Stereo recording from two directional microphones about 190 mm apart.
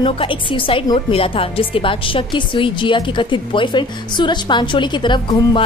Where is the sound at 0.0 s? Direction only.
30° left (ahead or behind).